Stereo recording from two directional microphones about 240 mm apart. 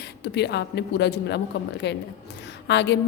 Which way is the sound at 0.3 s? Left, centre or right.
Left.